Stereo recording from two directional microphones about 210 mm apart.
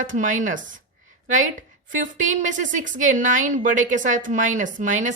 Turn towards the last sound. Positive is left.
turn(degrees=-35)  # may be behind; listen again after turning